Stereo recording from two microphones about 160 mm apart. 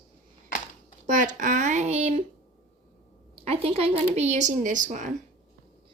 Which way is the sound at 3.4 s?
40° right (ahead or behind).